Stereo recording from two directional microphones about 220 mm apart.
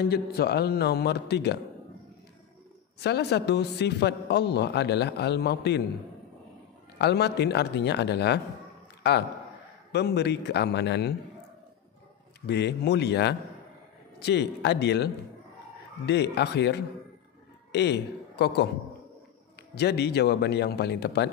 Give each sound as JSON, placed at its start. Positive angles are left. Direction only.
{"t": 0.0, "sound": "a man's voice", "side_deg": 45}
{"t": 3.0, "sound": "a man's voice", "side_deg": 50}
{"t": 7.0, "sound": "a man's voice", "side_deg": 50}
{"t": 9.9, "sound": "a man's voice", "side_deg": 50}
{"t": 12.4, "sound": "a man's voice", "side_deg": 50}
{"t": 16.1, "sound": "a man's voice", "side_deg": 50}
{"t": 19.7, "sound": "a man's voice", "side_deg": 50}